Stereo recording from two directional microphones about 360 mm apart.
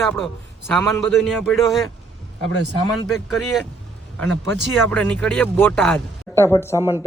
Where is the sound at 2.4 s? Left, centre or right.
Left.